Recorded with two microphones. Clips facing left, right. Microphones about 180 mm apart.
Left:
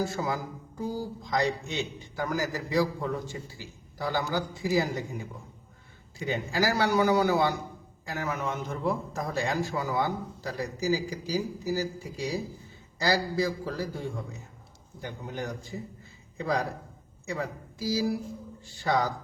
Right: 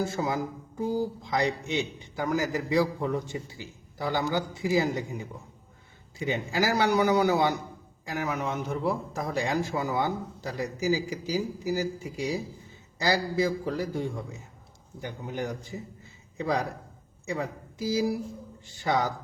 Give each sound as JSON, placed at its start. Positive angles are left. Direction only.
{"t": 0.0, "sound": "a man's voice", "side_deg": -20}
{"t": 17.2, "sound": "speech", "side_deg": -15}